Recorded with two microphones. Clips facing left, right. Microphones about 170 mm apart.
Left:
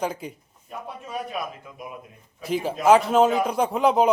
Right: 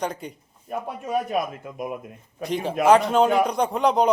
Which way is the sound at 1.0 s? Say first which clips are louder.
Right 7 dB; 50° right (ahead or behind).